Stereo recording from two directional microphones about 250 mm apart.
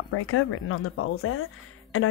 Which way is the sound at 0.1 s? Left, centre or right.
Left.